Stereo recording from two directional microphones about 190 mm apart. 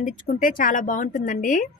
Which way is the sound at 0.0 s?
45° left (ahead or behind).